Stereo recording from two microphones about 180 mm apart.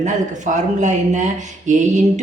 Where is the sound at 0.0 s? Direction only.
40° right (ahead or behind).